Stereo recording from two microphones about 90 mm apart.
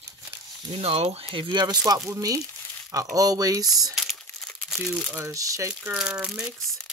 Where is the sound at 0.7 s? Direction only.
90° right; by 1.8 s 55° right (ahead or behind).